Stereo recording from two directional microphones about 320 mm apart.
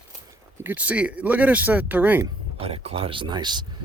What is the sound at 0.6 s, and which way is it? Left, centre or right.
Speech, centre.